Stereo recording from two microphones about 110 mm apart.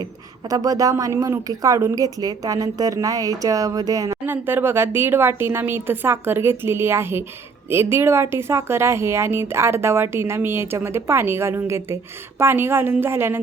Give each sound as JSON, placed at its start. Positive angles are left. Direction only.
{"t": 0.5, "sound": "a woman's voice", "side_deg": -35}
{"t": 4.3, "sound": "speech", "side_deg": -20}